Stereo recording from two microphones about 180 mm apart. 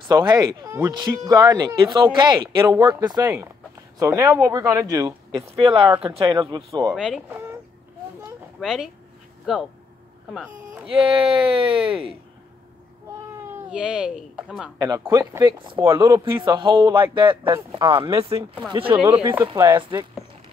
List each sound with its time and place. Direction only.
0.0 s speech: 25° right (ahead or behind)
7.0 s speech: 5° right (ahead or behind)
8.5 s speech: 5° right (ahead or behind)
11.3 s speech: 30° right (ahead or behind)
13.7 s speech: 5° right (ahead or behind)
14.8 s speech: 20° right (ahead or behind)
19.3 s speech: 15° right (ahead or behind)